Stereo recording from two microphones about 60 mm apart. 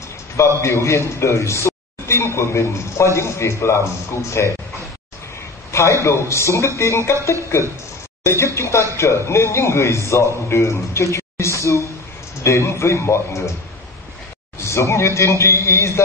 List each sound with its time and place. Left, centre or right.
0.6 s a man's voice: left
5.7 s a sound: left
6.0 s a man's voice: left
8.2 s a woman's voice: left
14.6 s a man's voice: left